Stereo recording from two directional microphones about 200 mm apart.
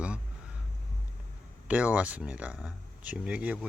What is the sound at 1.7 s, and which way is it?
Speech, 5° right (ahead or behind).